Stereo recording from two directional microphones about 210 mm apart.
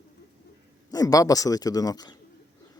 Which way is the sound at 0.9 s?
15° left (ahead or behind).